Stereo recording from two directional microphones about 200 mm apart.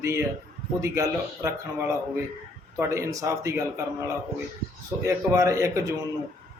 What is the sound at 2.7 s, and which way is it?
Speech, 15° right (ahead or behind).